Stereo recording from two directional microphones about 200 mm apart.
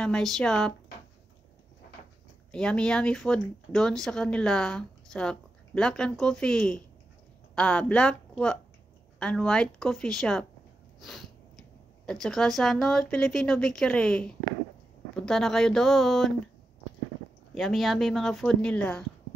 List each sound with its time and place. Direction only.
0.0 s speech: centre (ahead or behind)
2.5 s speech: 5° left (ahead or behind)
11.0 s sneeze: centre (ahead or behind)
12.1 s speech: centre (ahead or behind)
17.6 s speech: centre (ahead or behind)